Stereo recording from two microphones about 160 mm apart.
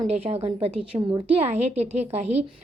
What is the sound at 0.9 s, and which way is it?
Speech, 20° right (ahead or behind).